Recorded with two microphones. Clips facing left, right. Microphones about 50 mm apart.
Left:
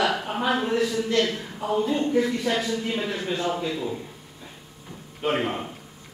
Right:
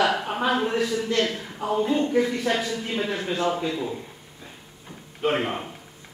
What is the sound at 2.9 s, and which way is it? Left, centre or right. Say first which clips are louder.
Speech: right 1 dB; centre.